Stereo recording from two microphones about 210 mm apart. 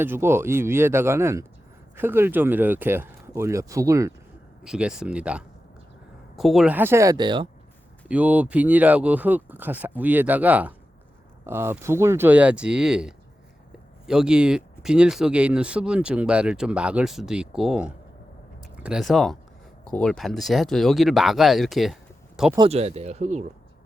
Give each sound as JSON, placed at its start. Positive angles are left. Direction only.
{"t": 0.0, "sound": "speech", "side_deg": -10}
{"t": 4.6, "sound": "speech", "side_deg": -5}
{"t": 8.0, "sound": "speech", "side_deg": -5}
{"t": 22.5, "sound": "speech", "side_deg": -25}